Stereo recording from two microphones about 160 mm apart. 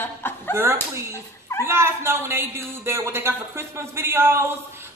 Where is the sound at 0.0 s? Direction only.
15° left (ahead or behind).